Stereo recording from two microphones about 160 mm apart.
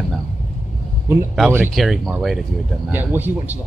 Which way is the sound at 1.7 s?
Centre (ahead or behind).